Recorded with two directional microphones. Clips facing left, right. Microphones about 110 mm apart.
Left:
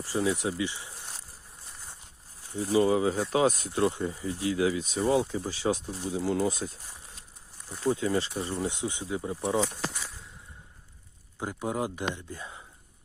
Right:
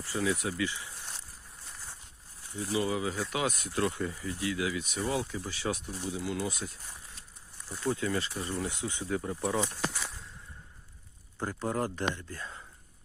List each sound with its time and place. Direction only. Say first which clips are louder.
0.0 s speech: left 3 dB; 25° left (ahead or behind)
2.4 s speech: left 7 dB; 35° left (ahead or behind)
7.9 s speech: left 4 dB; 25° left (ahead or behind)
11.3 s speech: left 1 dB; 10° left (ahead or behind)